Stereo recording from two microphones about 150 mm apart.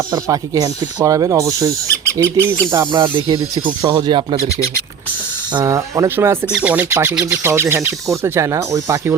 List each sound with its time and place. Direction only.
0.1 s speech: 25° right (ahead or behind)
3.2 s speech: 35° right (ahead or behind)
5.5 s speech: 20° right (ahead or behind)